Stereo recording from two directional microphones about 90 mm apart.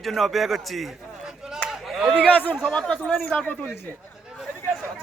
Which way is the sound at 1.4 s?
5° right (ahead or behind).